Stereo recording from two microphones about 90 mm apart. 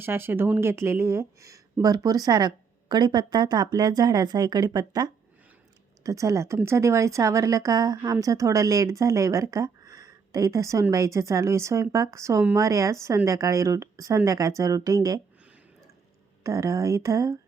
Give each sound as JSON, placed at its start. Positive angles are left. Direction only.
{"t": 0.0, "sound": "a woman's voice", "side_deg": -25}
{"t": 16.4, "sound": "a woman's voice", "side_deg": -35}